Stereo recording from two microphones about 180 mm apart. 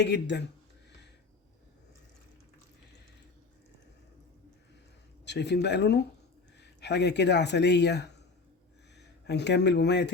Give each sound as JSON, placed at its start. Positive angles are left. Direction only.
{"t": 0.0, "sound": "speech", "side_deg": 70}
{"t": 5.2, "sound": "speech", "side_deg": 70}